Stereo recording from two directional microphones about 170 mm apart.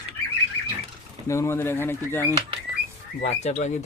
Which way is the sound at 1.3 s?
15° left (ahead or behind).